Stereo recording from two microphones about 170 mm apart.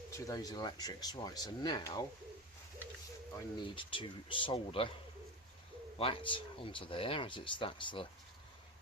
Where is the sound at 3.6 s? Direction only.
30° left (ahead or behind).